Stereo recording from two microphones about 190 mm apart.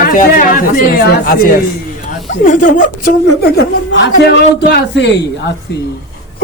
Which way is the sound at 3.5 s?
65° left (ahead or behind).